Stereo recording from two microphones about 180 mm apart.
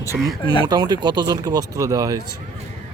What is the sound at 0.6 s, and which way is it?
Speech, 20° right (ahead or behind).